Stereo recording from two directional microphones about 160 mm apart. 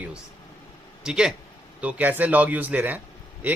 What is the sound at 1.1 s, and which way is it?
Speech, 5° right (ahead or behind).